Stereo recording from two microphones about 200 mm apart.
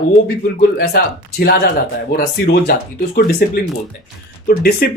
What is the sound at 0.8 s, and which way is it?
Speech, 50° left (ahead or behind).